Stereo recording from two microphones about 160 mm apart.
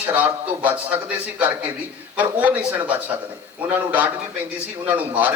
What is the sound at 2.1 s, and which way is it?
Speech, 10° right (ahead or behind).